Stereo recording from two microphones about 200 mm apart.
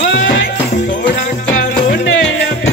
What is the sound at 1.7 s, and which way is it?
Music, 55° left (ahead or behind).